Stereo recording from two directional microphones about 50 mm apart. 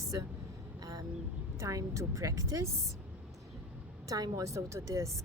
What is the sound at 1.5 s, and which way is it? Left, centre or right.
Speech, right.